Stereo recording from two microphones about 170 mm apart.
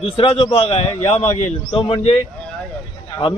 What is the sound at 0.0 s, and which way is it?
A man's voice, 35° left (ahead or behind).